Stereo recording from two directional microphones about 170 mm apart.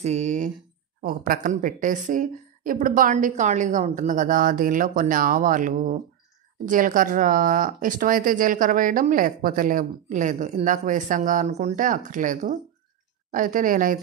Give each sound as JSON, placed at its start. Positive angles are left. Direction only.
{"t": 0.0, "sound": "speech", "side_deg": -45}
{"t": 1.0, "sound": "speech", "side_deg": -55}